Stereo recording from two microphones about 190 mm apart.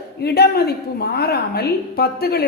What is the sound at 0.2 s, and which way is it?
A woman's voice, 55° left (ahead or behind).